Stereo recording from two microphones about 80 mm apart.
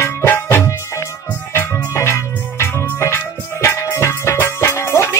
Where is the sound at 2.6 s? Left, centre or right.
Left.